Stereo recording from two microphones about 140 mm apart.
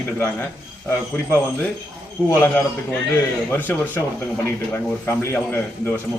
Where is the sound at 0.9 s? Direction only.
15° left (ahead or behind).